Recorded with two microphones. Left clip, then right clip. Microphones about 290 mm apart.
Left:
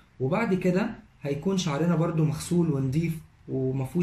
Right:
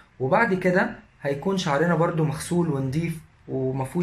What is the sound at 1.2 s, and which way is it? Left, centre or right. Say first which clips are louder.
Speech: right 4 dB; right.